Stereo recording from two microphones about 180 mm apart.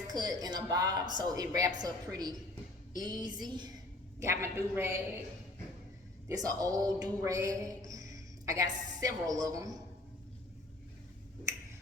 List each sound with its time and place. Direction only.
0.1 s a woman's voice: 20° right (ahead or behind)
6.2 s a woman's voice: 20° right (ahead or behind)